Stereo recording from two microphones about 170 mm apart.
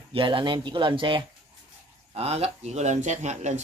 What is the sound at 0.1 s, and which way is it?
Speech, 30° right (ahead or behind).